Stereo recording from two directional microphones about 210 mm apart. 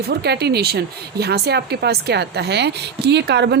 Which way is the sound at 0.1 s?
50° right (ahead or behind).